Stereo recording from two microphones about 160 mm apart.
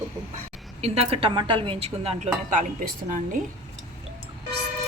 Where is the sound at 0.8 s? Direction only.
40° right (ahead or behind); by 3.3 s 55° right (ahead or behind).